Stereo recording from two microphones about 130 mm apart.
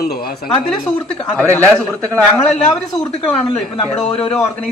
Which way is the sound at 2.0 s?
20° right (ahead or behind).